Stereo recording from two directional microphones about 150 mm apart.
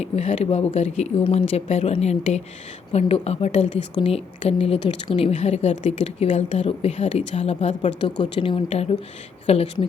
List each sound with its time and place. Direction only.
0.0 s a woman's voice: 40° left (ahead or behind)